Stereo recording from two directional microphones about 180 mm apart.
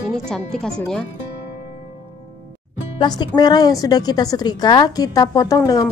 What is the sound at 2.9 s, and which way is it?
A woman's voice, 25° left (ahead or behind).